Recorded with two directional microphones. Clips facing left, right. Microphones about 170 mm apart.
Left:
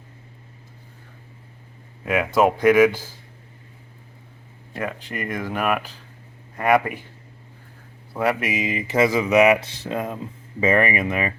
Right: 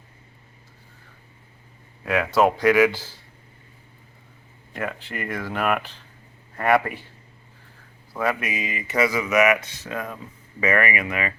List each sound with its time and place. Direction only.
2.0 s speech: 15° left (ahead or behind)
4.8 s speech: 15° left (ahead or behind)
8.1 s speech: 25° left (ahead or behind)